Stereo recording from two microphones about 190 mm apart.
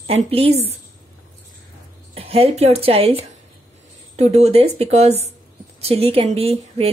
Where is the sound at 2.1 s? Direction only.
30° right (ahead or behind).